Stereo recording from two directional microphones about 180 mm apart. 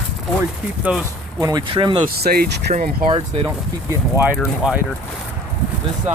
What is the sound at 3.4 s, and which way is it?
Speech, 10° right (ahead or behind).